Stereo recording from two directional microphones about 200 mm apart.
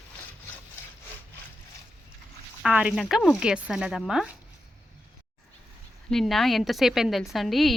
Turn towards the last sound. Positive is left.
turn(degrees=0)  # may be behind; listen again after turning